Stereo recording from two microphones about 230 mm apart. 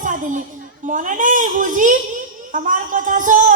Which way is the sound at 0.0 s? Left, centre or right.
Right.